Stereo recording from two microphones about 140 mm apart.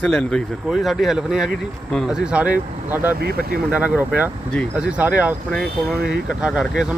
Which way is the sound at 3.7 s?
10° right (ahead or behind).